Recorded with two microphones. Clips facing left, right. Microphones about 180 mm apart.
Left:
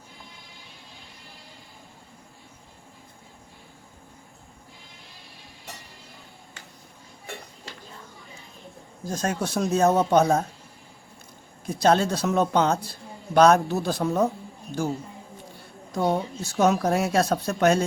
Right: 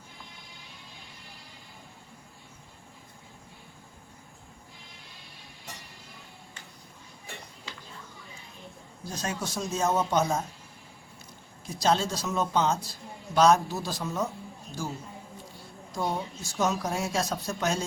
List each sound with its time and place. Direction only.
9.0 s speech: 50° left (ahead or behind)
11.7 s speech: 55° left (ahead or behind)
15.9 s speech: 60° left (ahead or behind)